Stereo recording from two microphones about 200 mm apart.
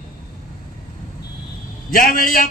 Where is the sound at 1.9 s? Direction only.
45° left (ahead or behind).